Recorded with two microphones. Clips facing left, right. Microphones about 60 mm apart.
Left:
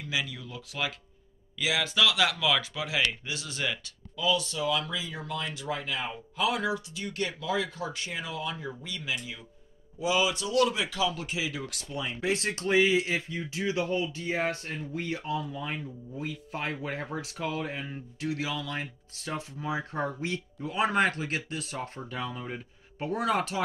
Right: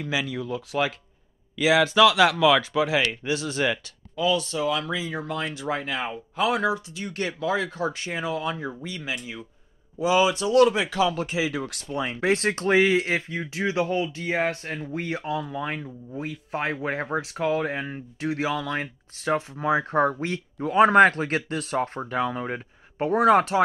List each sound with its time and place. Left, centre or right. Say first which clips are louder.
0.1 s speech: right 6 dB; right
1.6 s speech: right 10 dB; right
3.0 s speech: right 5 dB; right
14.1 s speech: right 4 dB; right